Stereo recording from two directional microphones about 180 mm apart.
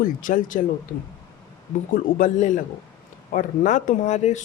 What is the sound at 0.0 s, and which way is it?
Speech, 50° left (ahead or behind).